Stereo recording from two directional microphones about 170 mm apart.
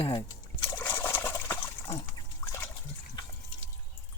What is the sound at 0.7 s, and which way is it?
Liquid, 10° left (ahead or behind).